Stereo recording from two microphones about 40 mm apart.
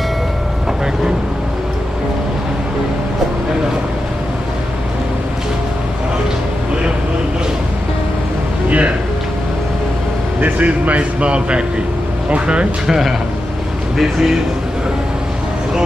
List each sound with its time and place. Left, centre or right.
8.6 s a sound: right
10.4 s speech: right
12.8 s a man's voice: centre